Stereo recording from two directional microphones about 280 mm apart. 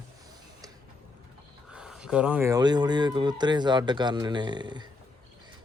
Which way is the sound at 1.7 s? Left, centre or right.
Centre.